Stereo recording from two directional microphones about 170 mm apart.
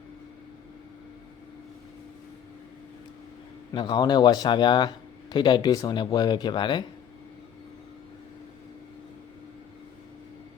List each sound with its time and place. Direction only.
3.7 s a man's voice: 25° left (ahead or behind)